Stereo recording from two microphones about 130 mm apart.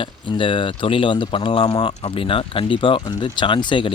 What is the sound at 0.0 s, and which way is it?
Speech, 40° left (ahead or behind).